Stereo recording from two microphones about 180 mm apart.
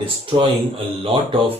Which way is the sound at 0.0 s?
30° right (ahead or behind).